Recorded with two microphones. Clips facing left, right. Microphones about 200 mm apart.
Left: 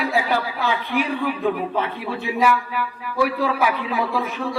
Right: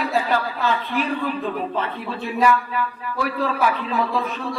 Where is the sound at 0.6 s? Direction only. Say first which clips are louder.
Even; 10° left (ahead or behind).